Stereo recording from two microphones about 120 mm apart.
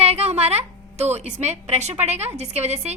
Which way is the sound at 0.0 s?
60° right (ahead or behind).